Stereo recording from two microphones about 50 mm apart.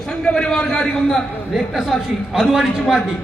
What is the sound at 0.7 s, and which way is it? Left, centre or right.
Speech, centre.